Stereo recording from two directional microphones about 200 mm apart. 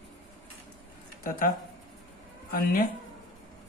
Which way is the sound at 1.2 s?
45° left (ahead or behind).